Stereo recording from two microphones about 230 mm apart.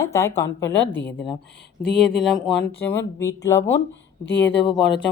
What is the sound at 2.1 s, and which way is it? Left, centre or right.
Speech, centre.